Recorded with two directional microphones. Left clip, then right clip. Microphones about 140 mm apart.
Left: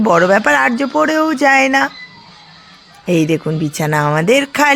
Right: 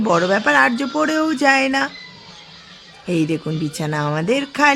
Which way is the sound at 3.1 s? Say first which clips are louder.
Left 6 dB; 35° left (ahead or behind).